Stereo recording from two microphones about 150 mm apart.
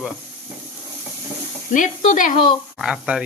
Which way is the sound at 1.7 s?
60° left (ahead or behind).